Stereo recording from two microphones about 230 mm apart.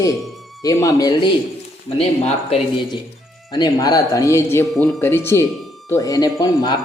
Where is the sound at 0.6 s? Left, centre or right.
Centre.